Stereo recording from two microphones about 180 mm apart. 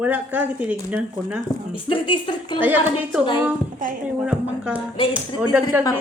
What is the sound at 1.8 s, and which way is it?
Speech, 30° left (ahead or behind).